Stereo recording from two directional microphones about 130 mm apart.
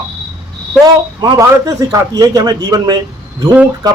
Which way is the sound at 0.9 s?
30° right (ahead or behind).